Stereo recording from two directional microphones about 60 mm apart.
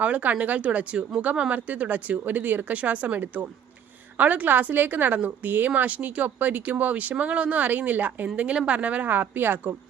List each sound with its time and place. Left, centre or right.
0.0 s a woman's voice: right